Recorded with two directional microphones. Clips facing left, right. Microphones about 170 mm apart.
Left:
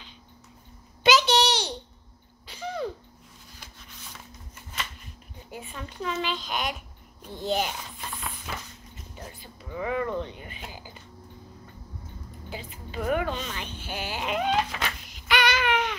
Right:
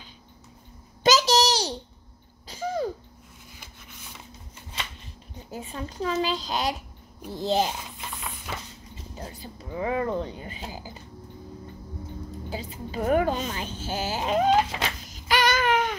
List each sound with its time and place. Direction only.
1.0 s a sound: 40° right (ahead or behind)
5.5 s a woman's voice: 40° right (ahead or behind)
9.7 s a woman's voice: 30° right (ahead or behind)
12.4 s a woman's voice: 35° right (ahead or behind)